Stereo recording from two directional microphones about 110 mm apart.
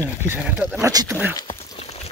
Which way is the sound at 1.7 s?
70° left (ahead or behind).